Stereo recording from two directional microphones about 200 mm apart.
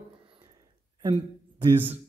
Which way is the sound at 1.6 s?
10° right (ahead or behind).